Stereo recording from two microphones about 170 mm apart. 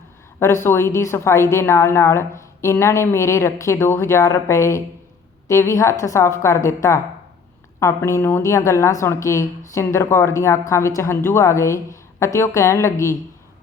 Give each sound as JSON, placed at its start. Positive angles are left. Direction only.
{"t": 0.3, "sound": "a woman's voice", "side_deg": 15}